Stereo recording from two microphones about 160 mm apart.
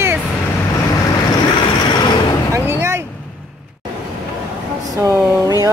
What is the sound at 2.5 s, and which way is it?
Speech, 15° right (ahead or behind).